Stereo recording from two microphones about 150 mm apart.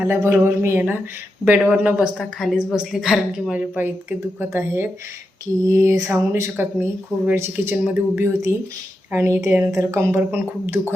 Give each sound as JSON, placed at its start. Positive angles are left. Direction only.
{"t": 0.1, "sound": "a woman's voice", "side_deg": -15}